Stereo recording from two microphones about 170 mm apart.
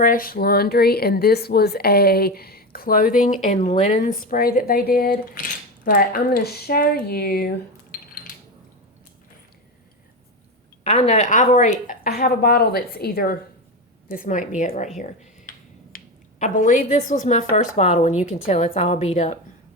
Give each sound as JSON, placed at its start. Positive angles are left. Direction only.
{"t": 0.0, "sound": "speech", "side_deg": 55}
{"t": 10.8, "sound": "speech", "side_deg": 35}
{"t": 14.1, "sound": "a woman's voice", "side_deg": 50}
{"t": 14.9, "sound": "a sound", "side_deg": 45}
{"t": 16.4, "sound": "a woman's voice", "side_deg": 45}